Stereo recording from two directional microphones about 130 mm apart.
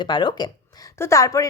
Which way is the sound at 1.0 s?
25° left (ahead or behind).